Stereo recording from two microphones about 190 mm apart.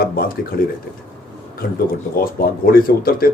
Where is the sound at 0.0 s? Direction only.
50° left (ahead or behind).